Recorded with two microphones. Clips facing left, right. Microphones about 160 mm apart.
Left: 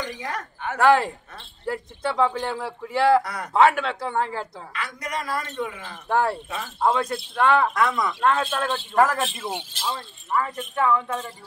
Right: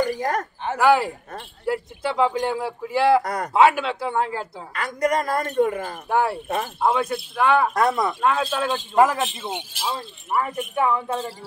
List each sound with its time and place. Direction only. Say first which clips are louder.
0.1 s a woman's voice: right 8 dB; 45° right (ahead or behind)
0.7 s a man's voice: even; 5° right (ahead or behind)
4.7 s a woman's voice: right 9 dB; 45° right (ahead or behind)
6.0 s a man's voice: even; 10° right (ahead or behind)
7.7 s speech: right 3 dB; 40° right (ahead or behind)
8.2 s a man's voice: right 1 dB; 5° right (ahead or behind)
10.9 s speech: even; 30° right (ahead or behind)